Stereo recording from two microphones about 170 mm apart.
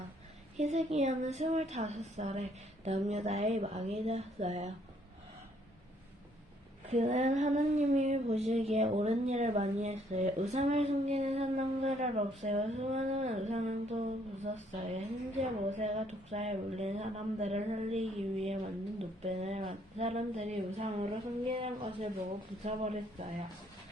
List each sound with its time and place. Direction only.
0.5 s humming: 40° right (ahead or behind)
6.9 s humming: 40° right (ahead or behind)